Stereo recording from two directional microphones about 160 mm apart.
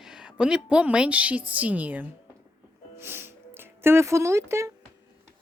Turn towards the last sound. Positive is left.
turn(degrees=-15)  # may be behind; listen again after turning